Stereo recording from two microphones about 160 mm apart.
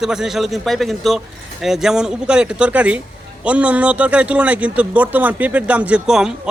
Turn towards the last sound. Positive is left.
turn(degrees=-5)  # may be behind; listen again after turning